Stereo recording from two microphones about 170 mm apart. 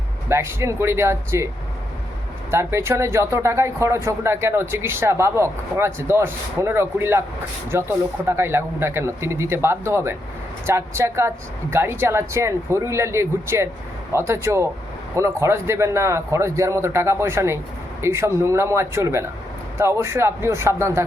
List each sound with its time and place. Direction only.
0.3 s speech: 15° right (ahead or behind)
2.5 s speech: 15° right (ahead or behind)